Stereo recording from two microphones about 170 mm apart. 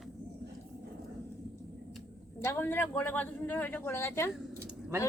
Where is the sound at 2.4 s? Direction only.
15° left (ahead or behind).